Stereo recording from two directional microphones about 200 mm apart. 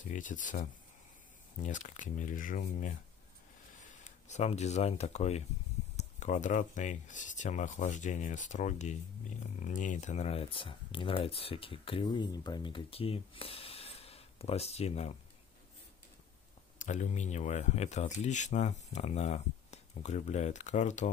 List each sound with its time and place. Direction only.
0.0 s speech: 40° left (ahead or behind)
4.0 s speech: 35° left (ahead or behind)
16.7 s speech: 40° left (ahead or behind)